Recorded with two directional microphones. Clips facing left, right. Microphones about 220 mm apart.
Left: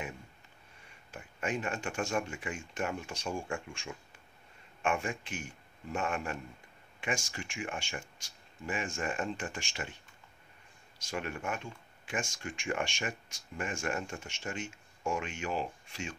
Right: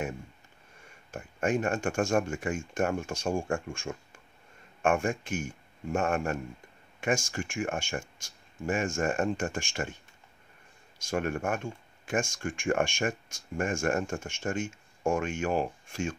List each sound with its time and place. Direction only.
1.1 s speech: 45° right (ahead or behind)
11.0 s speech: 50° right (ahead or behind)